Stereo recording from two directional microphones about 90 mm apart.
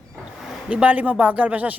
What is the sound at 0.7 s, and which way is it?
Speech, 15° right (ahead or behind).